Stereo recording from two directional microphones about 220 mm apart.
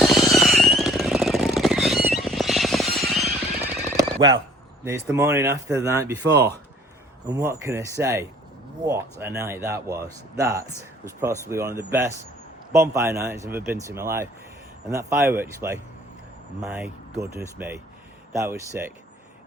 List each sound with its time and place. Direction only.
0.0 s squeal: centre (ahead or behind)
3.9 s a sound: 20° right (ahead or behind)
4.9 s a man's voice: 10° right (ahead or behind)
6.3 s speech: 50° right (ahead or behind)
7.3 s a man's voice: 15° right (ahead or behind)